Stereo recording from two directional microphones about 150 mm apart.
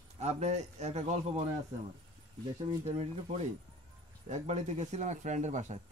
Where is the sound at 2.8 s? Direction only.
45° right (ahead or behind).